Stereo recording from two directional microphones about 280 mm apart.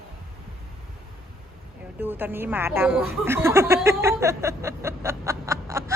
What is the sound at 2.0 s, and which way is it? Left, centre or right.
A woman's voice, centre.